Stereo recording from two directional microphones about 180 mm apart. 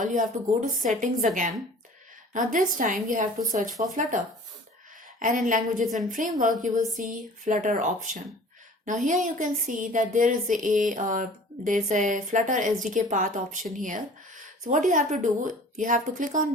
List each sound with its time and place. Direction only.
0.0 s speech: 45° right (ahead or behind)
2.3 s speech: 45° right (ahead or behind)
5.2 s speech: 45° right (ahead or behind)
8.9 s speech: 45° right (ahead or behind)